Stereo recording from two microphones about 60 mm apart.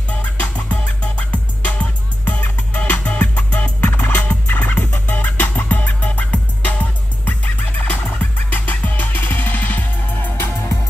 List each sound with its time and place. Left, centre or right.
0.4 s music: left
3.0 s music: centre
3.3 s music: left
4.3 s turkey: left